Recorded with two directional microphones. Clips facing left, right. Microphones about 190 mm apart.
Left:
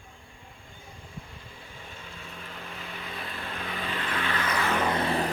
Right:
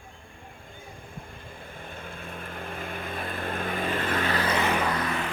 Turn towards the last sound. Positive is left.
turn(degrees=30)  # may be behind; listen again after turning